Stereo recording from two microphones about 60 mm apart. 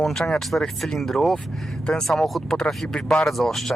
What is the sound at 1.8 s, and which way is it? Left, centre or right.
Speech, centre.